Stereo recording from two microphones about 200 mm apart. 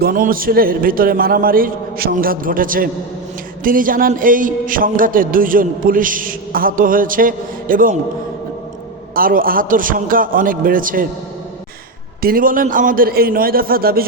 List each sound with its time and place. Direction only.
0.0 s a man's voice: 45° right (ahead or behind)
9.1 s a man's voice: 45° right (ahead or behind)
12.2 s a man's voice: 45° right (ahead or behind)